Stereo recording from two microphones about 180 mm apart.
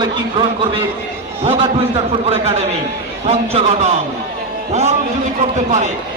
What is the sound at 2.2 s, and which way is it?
A man's voice, 35° right (ahead or behind).